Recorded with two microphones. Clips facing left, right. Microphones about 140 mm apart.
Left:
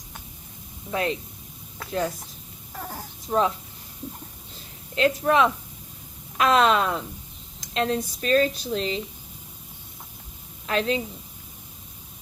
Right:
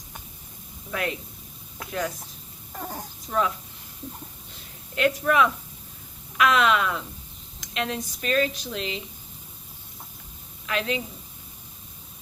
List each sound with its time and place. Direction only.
0.9 s speech: 30° left (ahead or behind)
2.7 s speech: 10° right (ahead or behind)
3.2 s speech: 30° left (ahead or behind)
4.9 s speech: 30° left (ahead or behind)
10.7 s speech: 35° left (ahead or behind)